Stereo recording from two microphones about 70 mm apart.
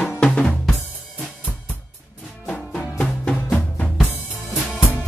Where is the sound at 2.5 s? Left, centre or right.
Centre.